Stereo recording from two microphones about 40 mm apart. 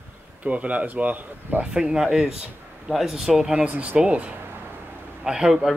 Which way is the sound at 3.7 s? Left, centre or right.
Right.